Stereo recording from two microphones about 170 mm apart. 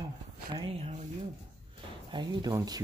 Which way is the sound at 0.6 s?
35° right (ahead or behind).